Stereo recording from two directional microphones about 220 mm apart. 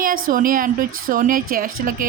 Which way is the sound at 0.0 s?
40° right (ahead or behind).